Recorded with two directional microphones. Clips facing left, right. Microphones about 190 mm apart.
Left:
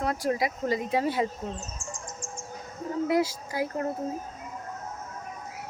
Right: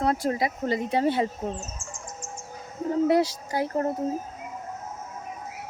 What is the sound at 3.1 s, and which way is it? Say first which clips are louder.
Speech: right 3 dB; 30° right (ahead or behind).